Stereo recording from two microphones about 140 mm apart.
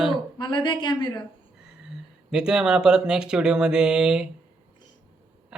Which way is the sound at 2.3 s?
5° right (ahead or behind).